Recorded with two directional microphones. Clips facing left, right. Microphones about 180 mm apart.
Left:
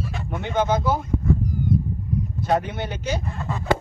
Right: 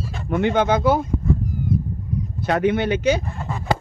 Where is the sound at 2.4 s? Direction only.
75° right (ahead or behind).